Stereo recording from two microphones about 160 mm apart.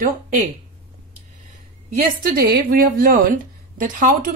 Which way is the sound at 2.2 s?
60° right (ahead or behind).